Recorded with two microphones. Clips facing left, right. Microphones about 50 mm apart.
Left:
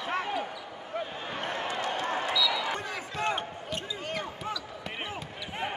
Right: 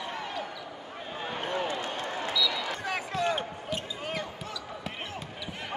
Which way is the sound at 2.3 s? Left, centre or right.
Centre.